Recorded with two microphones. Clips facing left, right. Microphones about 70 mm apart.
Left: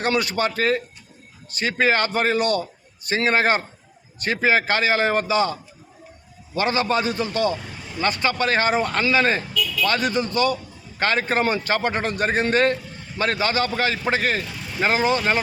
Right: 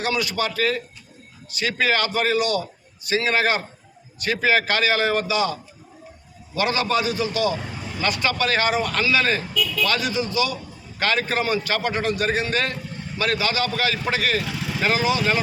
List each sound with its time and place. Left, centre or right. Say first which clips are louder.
0.0 s a man's voice: left 2 dB; left
4.4 s a man's voice: left 1 dB; left
6.6 s a man's voice: left 1 dB; left
11.0 s a man's voice: left 2 dB; left
14.4 s vehicle: right 5 dB; right
14.8 s a man's voice: left 2 dB; left